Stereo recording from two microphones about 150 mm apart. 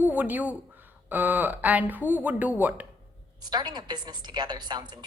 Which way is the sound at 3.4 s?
30° right (ahead or behind).